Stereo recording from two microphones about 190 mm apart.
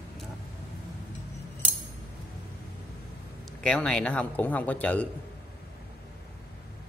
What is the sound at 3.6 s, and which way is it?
Speech, 5° left (ahead or behind).